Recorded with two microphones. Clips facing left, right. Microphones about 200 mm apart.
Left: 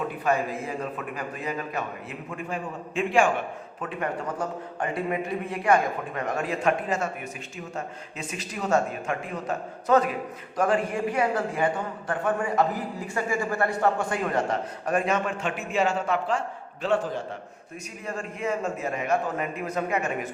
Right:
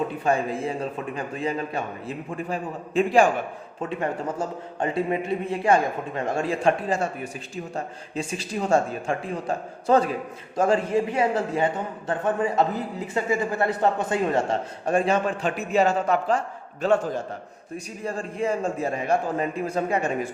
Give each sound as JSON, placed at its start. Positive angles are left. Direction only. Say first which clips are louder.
{"t": 0.3, "sound": "a man's voice", "louder": "right 2 dB", "side_deg": -30}
{"t": 18.0, "sound": "a man's voice", "louder": "right 4 dB", "side_deg": -30}